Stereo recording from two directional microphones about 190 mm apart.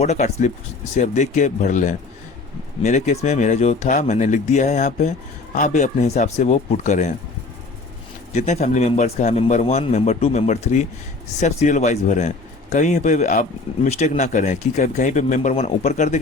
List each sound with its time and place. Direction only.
0.0 s speech: 35° left (ahead or behind)
8.3 s speech: 40° left (ahead or behind)